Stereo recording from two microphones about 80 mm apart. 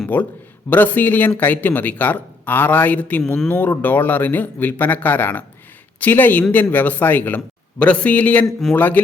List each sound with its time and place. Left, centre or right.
0.1 s a man's voice: left